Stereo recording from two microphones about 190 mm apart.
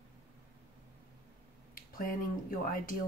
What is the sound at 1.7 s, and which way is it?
Speech, 50° left (ahead or behind).